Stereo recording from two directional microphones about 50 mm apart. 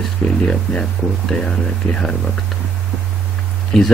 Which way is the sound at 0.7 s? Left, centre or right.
Centre.